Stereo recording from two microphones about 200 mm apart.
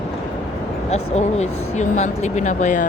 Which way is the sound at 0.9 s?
35° left (ahead or behind).